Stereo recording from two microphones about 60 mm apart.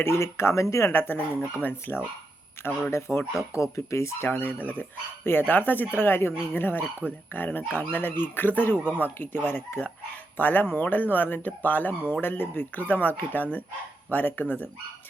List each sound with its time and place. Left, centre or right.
0.0 s speech: left
0.9 s speech: left
3.1 s speech: centre
3.5 s speech: left
4.3 s speech: left